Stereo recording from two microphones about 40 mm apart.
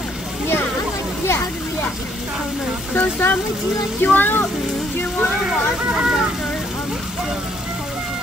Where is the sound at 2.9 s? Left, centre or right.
Left.